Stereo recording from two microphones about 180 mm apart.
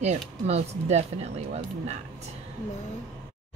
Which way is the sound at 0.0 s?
40° right (ahead or behind).